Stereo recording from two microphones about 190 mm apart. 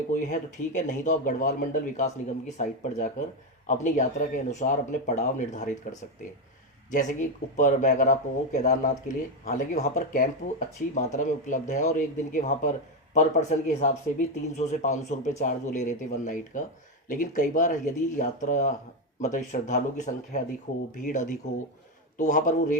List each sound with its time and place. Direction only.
0.1 s speech: 40° left (ahead or behind)
6.9 s speech: 40° left (ahead or behind)